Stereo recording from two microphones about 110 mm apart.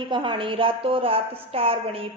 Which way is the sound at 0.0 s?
45° right (ahead or behind).